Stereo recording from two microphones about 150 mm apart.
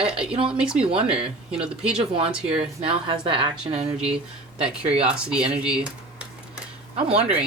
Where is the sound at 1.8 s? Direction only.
5° right (ahead or behind).